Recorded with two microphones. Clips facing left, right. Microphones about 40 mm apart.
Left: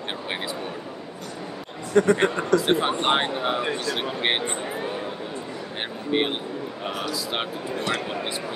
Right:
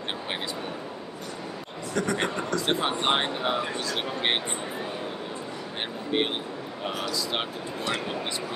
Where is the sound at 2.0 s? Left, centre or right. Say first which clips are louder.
Left 9 dB; left.